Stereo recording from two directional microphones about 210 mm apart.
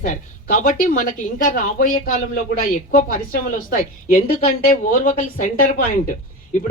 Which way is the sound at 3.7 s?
40° left (ahead or behind).